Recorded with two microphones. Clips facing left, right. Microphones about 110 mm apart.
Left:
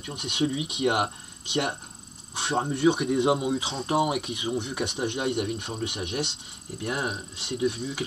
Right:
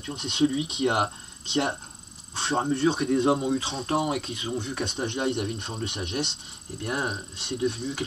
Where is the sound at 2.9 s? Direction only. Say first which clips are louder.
Right 1 dB; 20° left (ahead or behind).